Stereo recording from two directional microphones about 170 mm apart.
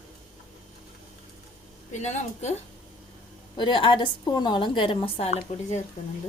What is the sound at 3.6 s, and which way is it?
A woman's voice, 30° left (ahead or behind).